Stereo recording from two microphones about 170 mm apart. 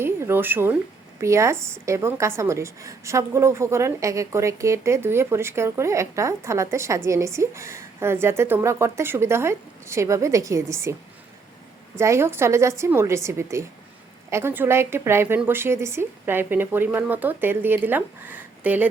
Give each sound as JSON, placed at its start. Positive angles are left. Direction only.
{"t": 0.0, "sound": "a woman's voice", "side_deg": -15}
{"t": 11.9, "sound": "a woman's voice", "side_deg": -15}